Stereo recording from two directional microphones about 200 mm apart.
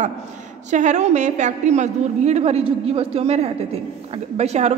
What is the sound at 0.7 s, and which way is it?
A woman's voice, 35° right (ahead or behind).